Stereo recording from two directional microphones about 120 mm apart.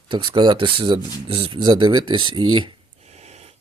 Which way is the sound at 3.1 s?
65° right (ahead or behind).